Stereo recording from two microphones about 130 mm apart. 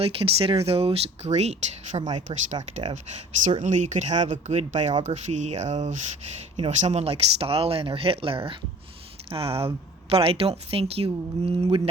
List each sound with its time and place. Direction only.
0.0 s speech: 45° right (ahead or behind)